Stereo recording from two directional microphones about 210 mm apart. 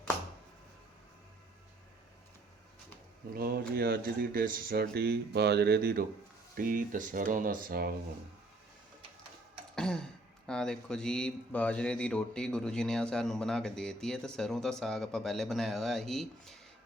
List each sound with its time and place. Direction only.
3.3 s speech: 45° right (ahead or behind)
9.7 s speech: 5° left (ahead or behind)